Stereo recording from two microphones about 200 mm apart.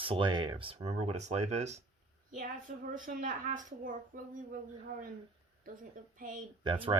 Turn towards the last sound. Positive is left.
turn(degrees=-25)  # may be behind; listen again after turning